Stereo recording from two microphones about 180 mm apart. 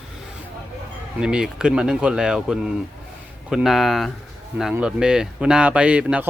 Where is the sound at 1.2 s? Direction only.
5° right (ahead or behind).